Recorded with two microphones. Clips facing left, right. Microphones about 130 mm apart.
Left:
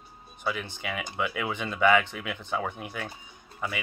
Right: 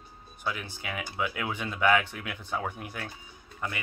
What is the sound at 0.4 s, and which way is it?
Speech, centre (ahead or behind).